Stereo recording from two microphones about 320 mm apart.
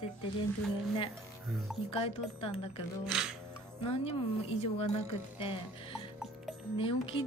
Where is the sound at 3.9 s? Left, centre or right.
Centre.